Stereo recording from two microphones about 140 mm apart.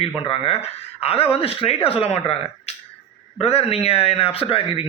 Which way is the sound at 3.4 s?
45° left (ahead or behind).